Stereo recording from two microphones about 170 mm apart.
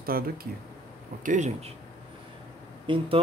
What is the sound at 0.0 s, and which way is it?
Speech, 60° right (ahead or behind).